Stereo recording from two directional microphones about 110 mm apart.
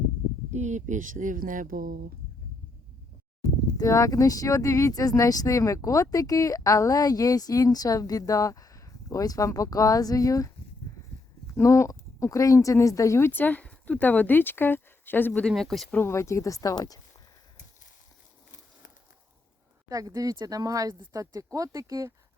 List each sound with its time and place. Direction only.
0.5 s speech: 90° right
3.4 s speech: 30° left (ahead or behind)
11.5 s speech: 25° left (ahead or behind)
15.3 s speech: 5° left (ahead or behind)
15.9 s speech: 20° left (ahead or behind)
19.9 s speech: 35° right (ahead or behind)